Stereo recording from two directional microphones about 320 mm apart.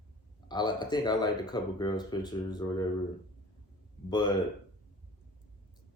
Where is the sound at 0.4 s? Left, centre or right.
Centre.